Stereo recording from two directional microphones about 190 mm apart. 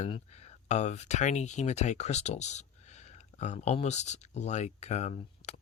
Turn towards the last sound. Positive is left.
turn(degrees=35)  # may be behind; listen again after turning